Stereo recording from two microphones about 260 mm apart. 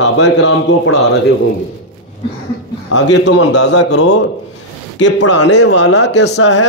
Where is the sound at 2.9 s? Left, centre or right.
Left.